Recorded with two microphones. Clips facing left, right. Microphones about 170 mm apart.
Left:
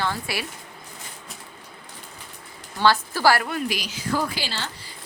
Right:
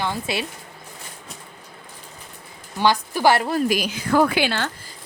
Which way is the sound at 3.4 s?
35° right (ahead or behind).